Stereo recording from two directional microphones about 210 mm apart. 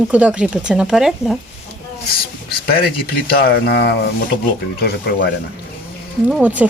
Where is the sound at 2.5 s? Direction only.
45° left (ahead or behind).